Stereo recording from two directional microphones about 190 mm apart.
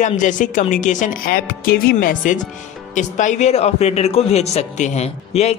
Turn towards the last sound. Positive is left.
turn(degrees=35)  # may be behind; listen again after turning